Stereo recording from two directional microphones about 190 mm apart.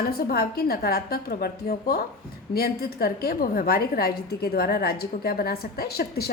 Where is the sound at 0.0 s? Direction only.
55° left (ahead or behind).